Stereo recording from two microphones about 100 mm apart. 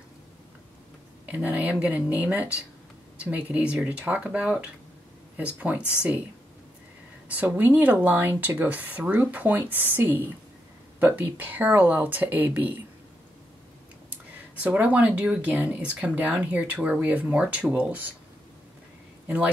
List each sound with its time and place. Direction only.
1.2 s speech: 15° right (ahead or behind)
7.4 s speech: 20° right (ahead or behind)
14.5 s speech: 15° right (ahead or behind)
19.2 s speech: 10° right (ahead or behind)